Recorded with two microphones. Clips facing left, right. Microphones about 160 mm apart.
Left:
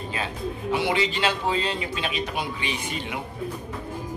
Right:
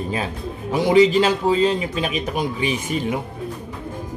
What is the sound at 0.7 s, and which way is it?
A man's voice, 40° right (ahead or behind).